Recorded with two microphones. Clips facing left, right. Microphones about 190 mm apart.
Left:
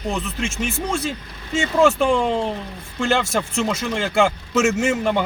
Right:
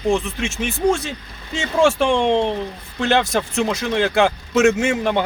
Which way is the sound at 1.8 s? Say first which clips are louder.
Right 1 dB; centre (ahead or behind).